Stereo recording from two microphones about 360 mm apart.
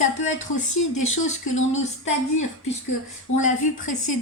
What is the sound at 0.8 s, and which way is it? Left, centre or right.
Speech, left.